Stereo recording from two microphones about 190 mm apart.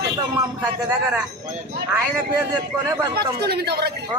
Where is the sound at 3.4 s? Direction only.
60° right (ahead or behind).